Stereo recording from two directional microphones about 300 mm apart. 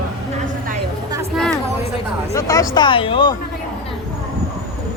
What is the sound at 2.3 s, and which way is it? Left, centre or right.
Speech, centre.